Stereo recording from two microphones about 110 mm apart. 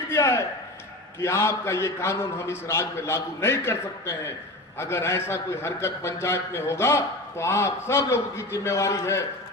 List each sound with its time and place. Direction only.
0.1 s a man's voice: 25° left (ahead or behind)